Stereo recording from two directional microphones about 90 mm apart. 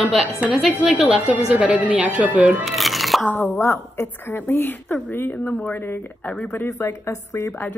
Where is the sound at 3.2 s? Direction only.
25° left (ahead or behind).